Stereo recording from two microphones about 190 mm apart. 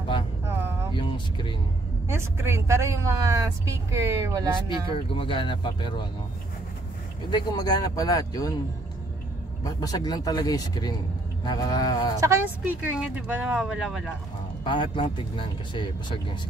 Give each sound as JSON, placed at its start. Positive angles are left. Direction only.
{"t": 0.9, "sound": "a man's voice", "side_deg": 25}
{"t": 2.0, "sound": "speech", "side_deg": -15}
{"t": 4.9, "sound": "a man's voice", "side_deg": 25}
{"t": 7.2, "sound": "a man's voice", "side_deg": 20}
{"t": 9.7, "sound": "a man's voice", "side_deg": 20}
{"t": 12.2, "sound": "speech", "side_deg": -15}
{"t": 14.6, "sound": "a man's voice", "side_deg": 25}